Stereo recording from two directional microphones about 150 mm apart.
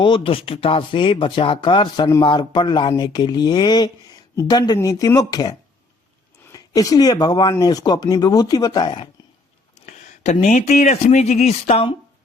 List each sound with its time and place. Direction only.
0.0 s speech: 35° left (ahead or behind)
10.4 s speech: 50° left (ahead or behind)